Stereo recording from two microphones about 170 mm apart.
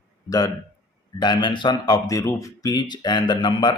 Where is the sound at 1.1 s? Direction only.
25° left (ahead or behind).